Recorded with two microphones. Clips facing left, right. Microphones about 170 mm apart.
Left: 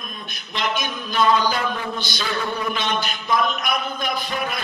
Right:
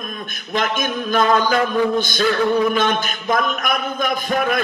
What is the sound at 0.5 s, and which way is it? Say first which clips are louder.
A man's voice: right 5 dB; 50° right (ahead or behind).